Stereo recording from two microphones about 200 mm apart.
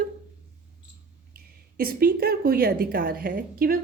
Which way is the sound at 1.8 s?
50° right (ahead or behind).